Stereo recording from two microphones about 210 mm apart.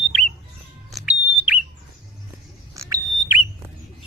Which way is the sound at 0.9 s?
5° right (ahead or behind).